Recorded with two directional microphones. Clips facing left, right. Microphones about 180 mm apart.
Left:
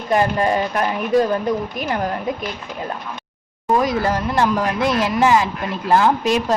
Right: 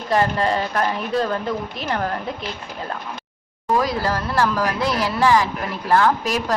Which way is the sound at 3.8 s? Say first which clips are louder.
Left 2 dB; 20° left (ahead or behind).